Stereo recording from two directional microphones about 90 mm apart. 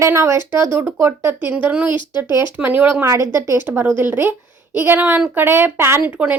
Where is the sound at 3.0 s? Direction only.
35° right (ahead or behind).